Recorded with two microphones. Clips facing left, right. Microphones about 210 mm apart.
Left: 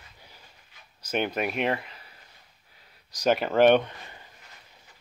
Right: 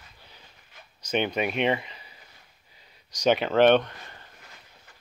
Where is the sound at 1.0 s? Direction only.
5° left (ahead or behind).